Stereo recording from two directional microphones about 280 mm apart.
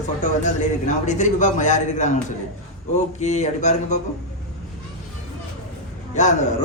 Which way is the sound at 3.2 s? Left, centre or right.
Left.